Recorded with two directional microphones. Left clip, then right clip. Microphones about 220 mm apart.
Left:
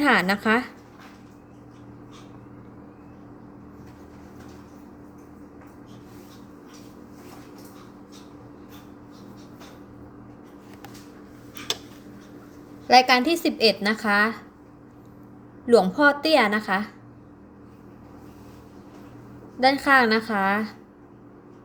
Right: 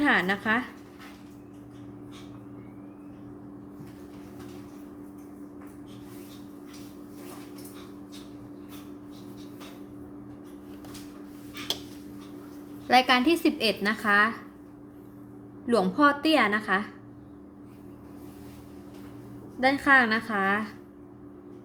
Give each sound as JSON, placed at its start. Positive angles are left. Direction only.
{"t": 0.0, "sound": "speech", "side_deg": 20}
{"t": 12.9, "sound": "a woman's voice", "side_deg": 10}
{"t": 15.6, "sound": "a woman's voice", "side_deg": 10}
{"t": 19.5, "sound": "a woman's voice", "side_deg": 10}